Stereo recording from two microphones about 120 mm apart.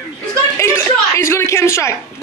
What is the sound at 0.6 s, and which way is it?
Speech, 25° left (ahead or behind).